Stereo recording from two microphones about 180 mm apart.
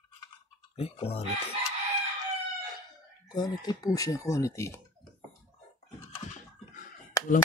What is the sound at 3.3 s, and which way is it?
Speech, 20° left (ahead or behind).